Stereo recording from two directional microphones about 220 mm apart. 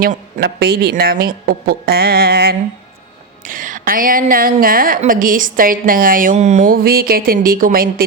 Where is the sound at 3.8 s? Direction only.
40° right (ahead or behind).